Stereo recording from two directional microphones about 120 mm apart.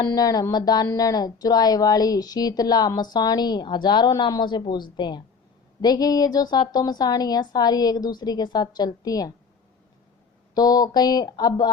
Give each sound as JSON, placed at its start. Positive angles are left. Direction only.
{"t": 0.0, "sound": "speech", "side_deg": 30}
{"t": 10.5, "sound": "speech", "side_deg": 30}